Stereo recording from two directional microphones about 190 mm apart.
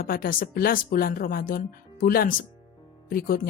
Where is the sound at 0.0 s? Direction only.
50° left (ahead or behind).